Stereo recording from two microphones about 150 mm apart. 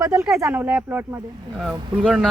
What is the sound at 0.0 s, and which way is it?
A man's voice, 15° right (ahead or behind).